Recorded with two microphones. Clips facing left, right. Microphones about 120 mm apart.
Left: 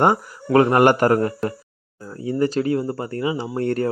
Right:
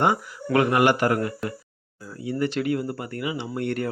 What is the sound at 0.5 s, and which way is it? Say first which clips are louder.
Speech: left 5 dB; 40° left (ahead or behind).